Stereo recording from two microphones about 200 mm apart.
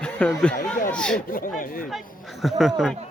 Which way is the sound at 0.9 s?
5° left (ahead or behind).